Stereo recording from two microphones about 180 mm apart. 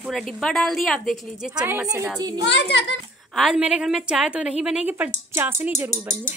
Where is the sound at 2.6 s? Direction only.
70° left (ahead or behind).